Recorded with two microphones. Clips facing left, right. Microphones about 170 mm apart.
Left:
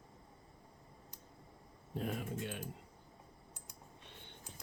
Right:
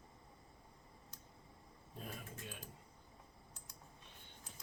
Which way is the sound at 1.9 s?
75° left (ahead or behind).